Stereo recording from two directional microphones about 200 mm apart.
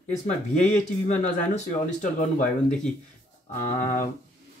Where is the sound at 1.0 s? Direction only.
35° left (ahead or behind).